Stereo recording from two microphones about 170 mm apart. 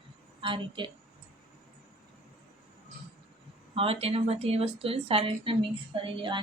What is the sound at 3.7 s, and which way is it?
A woman's voice, 35° right (ahead or behind).